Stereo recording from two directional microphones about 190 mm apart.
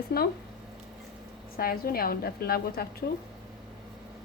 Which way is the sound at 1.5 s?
50° left (ahead or behind).